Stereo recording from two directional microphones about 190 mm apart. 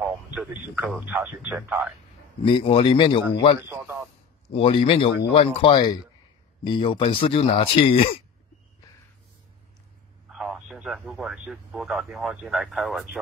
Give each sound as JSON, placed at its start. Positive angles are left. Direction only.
{"t": 0.0, "sound": "radio", "side_deg": -5}
{"t": 0.9, "sound": "a man's voice", "side_deg": -10}
{"t": 2.4, "sound": "speech", "side_deg": 30}
{"t": 3.6, "sound": "a man's voice", "side_deg": -10}
{"t": 4.5, "sound": "speech", "side_deg": 30}
{"t": 10.3, "sound": "speech", "side_deg": 0}